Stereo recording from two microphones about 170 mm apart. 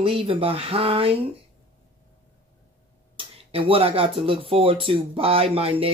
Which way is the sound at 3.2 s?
35° right (ahead or behind).